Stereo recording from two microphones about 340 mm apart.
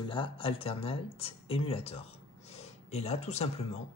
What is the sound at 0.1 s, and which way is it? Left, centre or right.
A man's voice, centre.